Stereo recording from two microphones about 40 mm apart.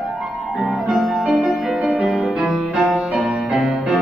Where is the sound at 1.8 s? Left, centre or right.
Right.